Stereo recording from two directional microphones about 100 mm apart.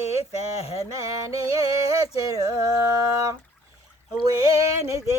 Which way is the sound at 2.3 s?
35° right (ahead or behind).